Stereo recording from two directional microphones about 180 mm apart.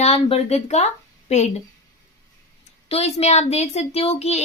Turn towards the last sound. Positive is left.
turn(degrees=35)  # may be behind; listen again after turning